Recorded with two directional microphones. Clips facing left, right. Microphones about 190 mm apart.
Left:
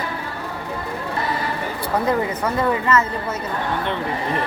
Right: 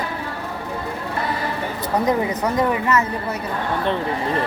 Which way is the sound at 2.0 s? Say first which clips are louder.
Right 1 dB; 15° right (ahead or behind).